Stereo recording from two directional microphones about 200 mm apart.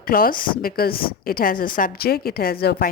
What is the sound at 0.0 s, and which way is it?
A woman's voice, 45° left (ahead or behind).